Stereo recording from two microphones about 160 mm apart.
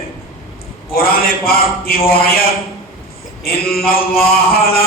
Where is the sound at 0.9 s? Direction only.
70° left (ahead or behind).